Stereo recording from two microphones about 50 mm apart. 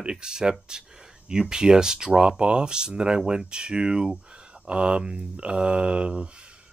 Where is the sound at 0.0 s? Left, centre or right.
Centre.